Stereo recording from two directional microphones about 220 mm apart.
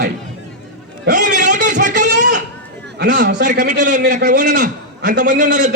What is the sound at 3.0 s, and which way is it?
Speech, 50° right (ahead or behind).